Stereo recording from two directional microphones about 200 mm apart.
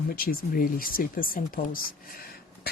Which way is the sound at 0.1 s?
45° left (ahead or behind).